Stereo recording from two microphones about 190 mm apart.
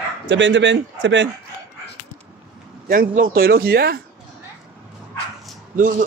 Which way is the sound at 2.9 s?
45° right (ahead or behind).